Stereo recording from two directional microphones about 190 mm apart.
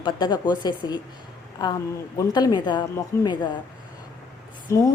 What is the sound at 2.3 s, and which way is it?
A woman's voice, 20° left (ahead or behind).